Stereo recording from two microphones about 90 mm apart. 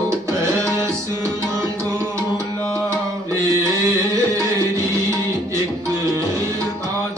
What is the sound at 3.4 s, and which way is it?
Music, 35° right (ahead or behind).